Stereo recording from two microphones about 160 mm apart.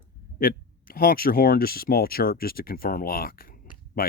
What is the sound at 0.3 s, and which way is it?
Speech, 65° left (ahead or behind).